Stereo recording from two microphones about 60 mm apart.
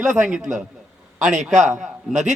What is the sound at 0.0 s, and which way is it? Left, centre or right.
A man's voice, centre.